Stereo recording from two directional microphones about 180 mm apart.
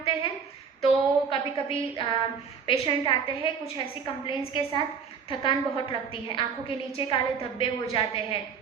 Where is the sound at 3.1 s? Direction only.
30° left (ahead or behind).